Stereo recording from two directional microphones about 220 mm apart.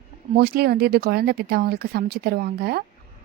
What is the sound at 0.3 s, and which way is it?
Speech, 45° right (ahead or behind).